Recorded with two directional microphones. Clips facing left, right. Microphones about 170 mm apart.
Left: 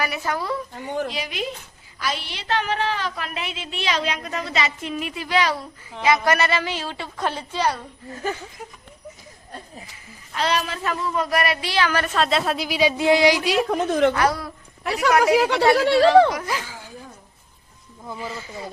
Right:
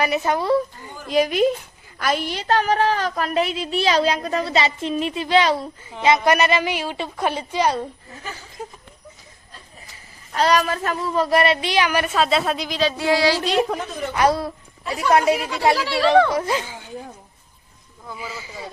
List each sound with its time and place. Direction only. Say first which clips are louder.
0.0 s a woman's voice: right 5 dB; 20° right (ahead or behind)
1.0 s a woman's voice: right 11 dB; 45° right (ahead or behind); by 7.8 s 15° right (ahead or behind)
8.6 s a woman's voice: right 5 dB; 30° right (ahead or behind)
10.3 s a woman's voice: right 5 dB; 40° right (ahead or behind); by 12.1 s 15° right (ahead or behind)
12.1 s a woman's voice: right 1 dB; centre (ahead or behind)
13.0 s child singing: left 2 dB; 20° left (ahead or behind)
13.6 s a woman's voice: even; centre (ahead or behind)
14.2 s a woman's voice: right 3 dB; 25° right (ahead or behind)
14.8 s speech: even; 90° left
16.3 s speech: right 5 dB; 25° right (ahead or behind)
18.2 s a woman's voice: left 1 dB; 5° right (ahead or behind)